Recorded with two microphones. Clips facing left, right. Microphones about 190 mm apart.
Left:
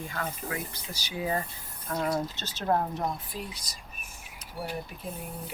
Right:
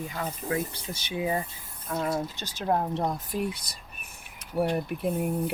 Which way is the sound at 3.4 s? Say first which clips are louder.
Right 9 dB; 55° right (ahead or behind).